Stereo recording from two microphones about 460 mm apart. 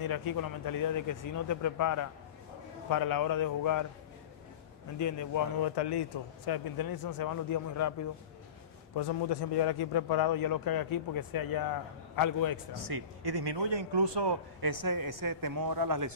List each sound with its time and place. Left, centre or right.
0.0 s a man's voice: left
4.9 s speech: left
5.6 s a man's voice: left
8.9 s a man's voice: left
12.7 s speech: right